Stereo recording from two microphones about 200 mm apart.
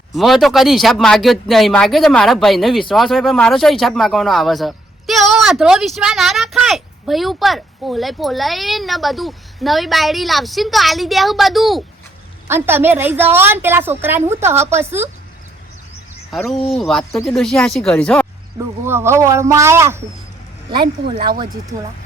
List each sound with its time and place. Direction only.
0.2 s speech: centre (ahead or behind)
12.5 s a woman's voice: 10° right (ahead or behind)
16.4 s speech: centre (ahead or behind)
17.0 s speech: 15° left (ahead or behind)
17.2 s speech: centre (ahead or behind)
18.9 s a woman's voice: 10° right (ahead or behind)
20.7 s speech: 25° right (ahead or behind)